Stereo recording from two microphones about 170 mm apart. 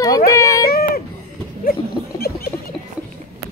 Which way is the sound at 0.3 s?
20° left (ahead or behind).